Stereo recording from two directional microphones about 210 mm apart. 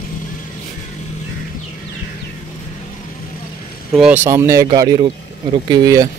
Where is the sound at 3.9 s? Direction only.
5° right (ahead or behind).